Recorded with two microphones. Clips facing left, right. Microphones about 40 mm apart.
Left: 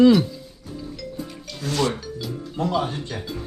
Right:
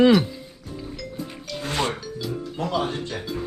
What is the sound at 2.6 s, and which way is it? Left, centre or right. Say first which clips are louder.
Speech: left 2 dB; right.